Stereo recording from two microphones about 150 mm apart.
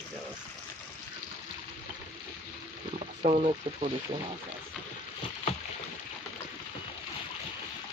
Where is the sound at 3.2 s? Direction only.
50° right (ahead or behind).